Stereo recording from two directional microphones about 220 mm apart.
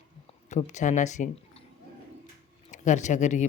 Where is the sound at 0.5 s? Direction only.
35° left (ahead or behind).